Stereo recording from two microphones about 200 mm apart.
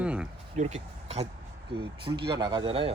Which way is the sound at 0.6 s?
40° right (ahead or behind).